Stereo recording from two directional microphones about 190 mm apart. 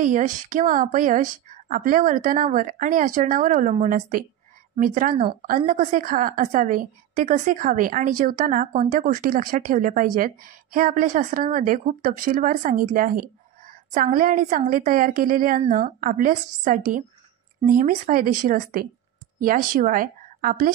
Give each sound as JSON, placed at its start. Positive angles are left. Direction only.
{"t": 0.0, "sound": "a woman's voice", "side_deg": -40}
{"t": 5.1, "sound": "a woman's voice", "side_deg": -25}
{"t": 5.7, "sound": "a woman's voice", "side_deg": -40}